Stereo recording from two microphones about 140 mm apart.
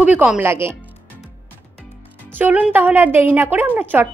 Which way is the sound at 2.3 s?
10° right (ahead or behind).